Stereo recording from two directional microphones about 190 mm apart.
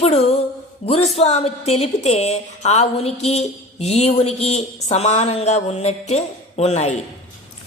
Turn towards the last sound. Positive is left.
turn(degrees=35)  # may be behind; listen again after turning